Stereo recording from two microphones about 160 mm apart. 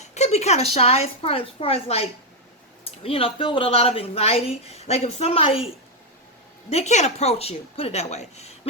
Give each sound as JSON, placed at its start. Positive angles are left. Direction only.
{"t": 0.1, "sound": "speech", "side_deg": 45}